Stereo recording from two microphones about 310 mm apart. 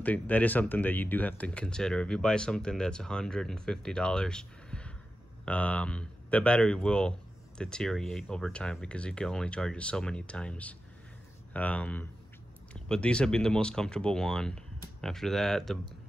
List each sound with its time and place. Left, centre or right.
0.0 s speech: centre